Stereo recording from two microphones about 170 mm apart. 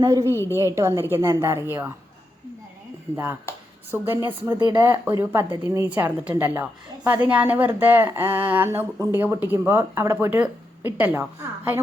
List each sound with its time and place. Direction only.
0.0 s a woman's voice: 20° right (ahead or behind)
3.9 s speech: 15° right (ahead or behind)